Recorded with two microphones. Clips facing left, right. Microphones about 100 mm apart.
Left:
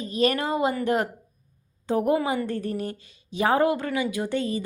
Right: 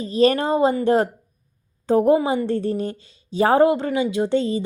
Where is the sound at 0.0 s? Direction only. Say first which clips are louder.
Right 6 dB; 30° right (ahead or behind).